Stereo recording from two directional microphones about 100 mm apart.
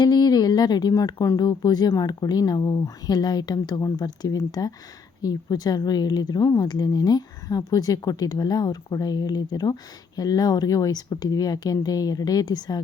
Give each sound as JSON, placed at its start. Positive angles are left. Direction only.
{"t": 0.0, "sound": "speech", "side_deg": 45}